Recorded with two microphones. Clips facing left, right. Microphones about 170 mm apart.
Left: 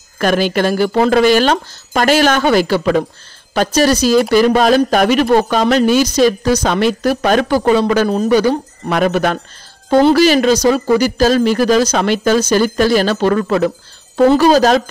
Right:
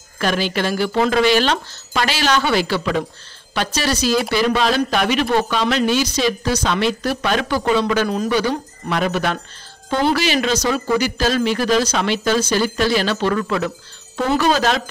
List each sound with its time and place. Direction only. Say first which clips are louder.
0.2 s speech: left 6 dB; 45° left (ahead or behind)